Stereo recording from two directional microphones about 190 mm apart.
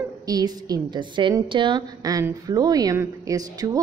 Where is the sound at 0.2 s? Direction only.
20° right (ahead or behind).